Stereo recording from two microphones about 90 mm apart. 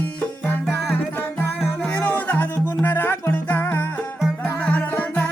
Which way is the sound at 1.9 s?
20° left (ahead or behind).